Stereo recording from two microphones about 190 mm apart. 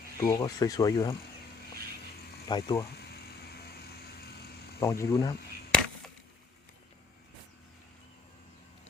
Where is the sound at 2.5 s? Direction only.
20° left (ahead or behind).